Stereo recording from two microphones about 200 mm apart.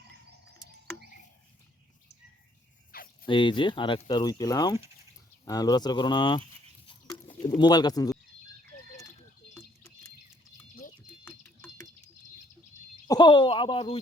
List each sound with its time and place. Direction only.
2.9 s dog: 50° left (ahead or behind)
3.2 s speech: 25° left (ahead or behind)
6.8 s bird: 25° left (ahead or behind)
11.3 s a sound: 5° left (ahead or behind)
13.1 s speech: 20° left (ahead or behind)